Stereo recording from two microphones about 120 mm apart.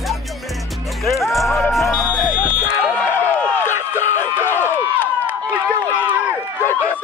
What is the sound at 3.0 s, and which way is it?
Run, 15° left (ahead or behind).